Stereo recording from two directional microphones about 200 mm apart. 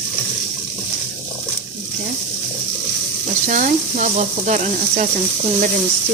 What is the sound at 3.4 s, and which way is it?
Speech, 40° right (ahead or behind).